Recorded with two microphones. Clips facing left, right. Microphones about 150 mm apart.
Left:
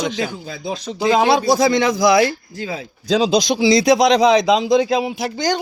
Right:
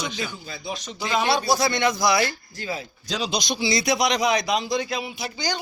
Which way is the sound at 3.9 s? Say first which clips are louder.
Left 8 dB; 90° left.